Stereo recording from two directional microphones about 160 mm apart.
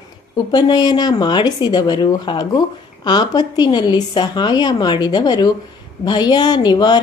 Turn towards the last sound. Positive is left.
turn(degrees=30)  # may be behind; listen again after turning